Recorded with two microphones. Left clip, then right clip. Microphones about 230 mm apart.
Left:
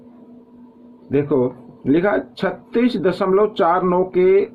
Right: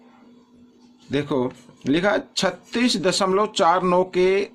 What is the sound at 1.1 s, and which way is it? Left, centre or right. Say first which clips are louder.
Speech: left 6 dB; right.